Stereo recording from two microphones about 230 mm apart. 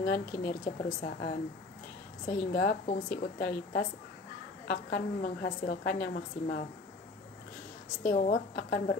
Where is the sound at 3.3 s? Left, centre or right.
Left.